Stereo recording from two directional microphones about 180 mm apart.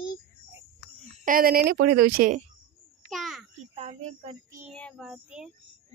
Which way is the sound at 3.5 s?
35° right (ahead or behind).